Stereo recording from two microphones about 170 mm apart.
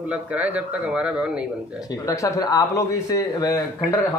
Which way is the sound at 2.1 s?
20° left (ahead or behind).